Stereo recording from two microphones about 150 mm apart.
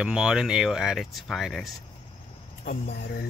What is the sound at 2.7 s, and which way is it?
Speech, 90° left.